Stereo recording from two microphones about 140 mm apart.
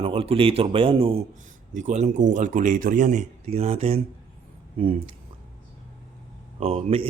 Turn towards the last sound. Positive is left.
turn(degrees=-50)  # may be behind; listen again after turning